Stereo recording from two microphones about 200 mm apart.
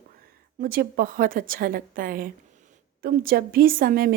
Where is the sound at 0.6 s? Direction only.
50° right (ahead or behind).